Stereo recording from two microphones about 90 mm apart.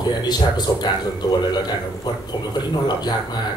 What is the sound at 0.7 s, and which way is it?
Speech, 45° left (ahead or behind).